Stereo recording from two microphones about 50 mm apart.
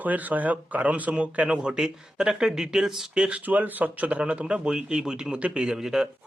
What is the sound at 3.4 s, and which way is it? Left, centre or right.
Speech, right.